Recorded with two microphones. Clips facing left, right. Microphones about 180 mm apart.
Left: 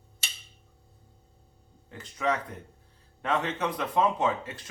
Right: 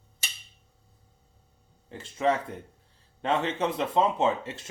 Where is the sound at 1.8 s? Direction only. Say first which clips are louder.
Right 3 dB; 30° right (ahead or behind).